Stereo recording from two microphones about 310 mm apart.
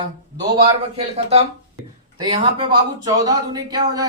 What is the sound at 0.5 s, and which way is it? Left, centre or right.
Speech, centre.